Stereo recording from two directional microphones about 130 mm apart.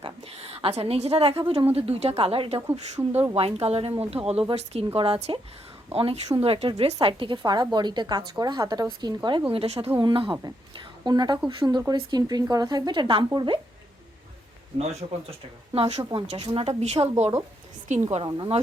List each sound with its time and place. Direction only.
0.0 s a woman's voice: 50° right (ahead or behind)
2.7 s a woman's voice: 60° right (ahead or behind); by 9.4 s 35° right (ahead or behind)
9.5 s speech: 50° right (ahead or behind)
10.0 s a woman's voice: 35° right (ahead or behind)
14.8 s speech: 55° right (ahead or behind)
18.3 s a woman's voice: 35° right (ahead or behind)